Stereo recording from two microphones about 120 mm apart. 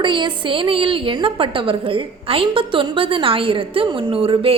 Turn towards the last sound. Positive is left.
turn(degrees=-50)  # may be behind; listen again after turning